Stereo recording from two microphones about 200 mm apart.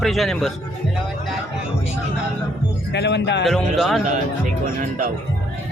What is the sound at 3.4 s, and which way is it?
Speech, centre (ahead or behind).